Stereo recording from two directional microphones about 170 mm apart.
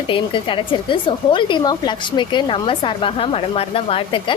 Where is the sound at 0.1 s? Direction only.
30° left (ahead or behind).